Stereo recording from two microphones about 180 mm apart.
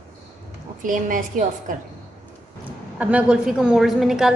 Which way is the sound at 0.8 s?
50° right (ahead or behind).